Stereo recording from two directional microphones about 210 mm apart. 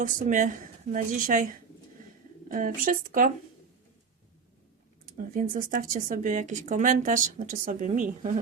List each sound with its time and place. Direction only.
0.0 s speech: 40° right (ahead or behind)
2.0 s bird: 40° right (ahead or behind)
2.5 s speech: 40° right (ahead or behind)
5.1 s speech: 40° right (ahead or behind)